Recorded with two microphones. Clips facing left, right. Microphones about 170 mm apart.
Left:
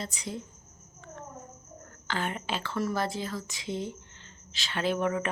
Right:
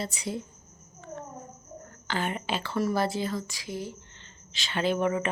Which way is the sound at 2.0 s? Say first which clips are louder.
Right 2 dB; centre (ahead or behind).